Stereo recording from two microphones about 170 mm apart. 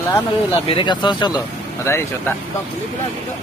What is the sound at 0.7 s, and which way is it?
Speech, 30° left (ahead or behind).